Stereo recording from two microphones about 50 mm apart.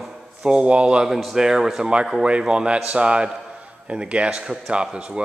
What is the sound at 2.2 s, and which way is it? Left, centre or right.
A man's voice, centre.